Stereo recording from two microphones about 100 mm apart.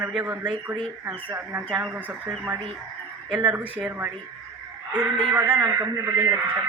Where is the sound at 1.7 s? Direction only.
10° right (ahead or behind).